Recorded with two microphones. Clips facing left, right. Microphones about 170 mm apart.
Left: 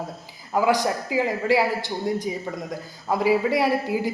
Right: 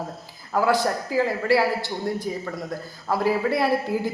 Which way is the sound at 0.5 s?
15° left (ahead or behind).